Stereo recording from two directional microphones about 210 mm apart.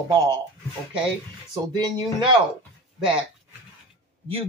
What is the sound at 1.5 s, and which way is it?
Speech, 20° right (ahead or behind).